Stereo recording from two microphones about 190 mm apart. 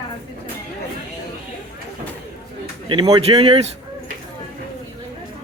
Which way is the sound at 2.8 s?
25° right (ahead or behind).